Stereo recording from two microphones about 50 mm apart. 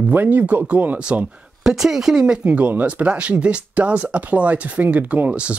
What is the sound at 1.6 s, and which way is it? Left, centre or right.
Speech, centre.